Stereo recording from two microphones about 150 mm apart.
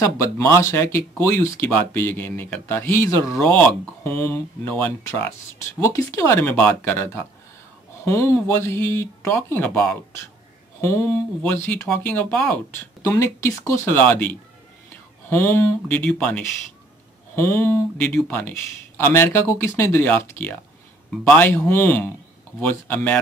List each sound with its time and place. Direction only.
0.0 s speech: 20° left (ahead or behind)